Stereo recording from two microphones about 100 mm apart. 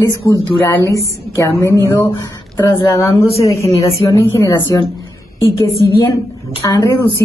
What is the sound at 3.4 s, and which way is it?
Speech, 30° left (ahead or behind).